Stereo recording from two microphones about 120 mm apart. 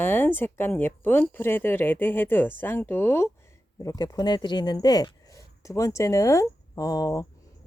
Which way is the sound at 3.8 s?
30° left (ahead or behind).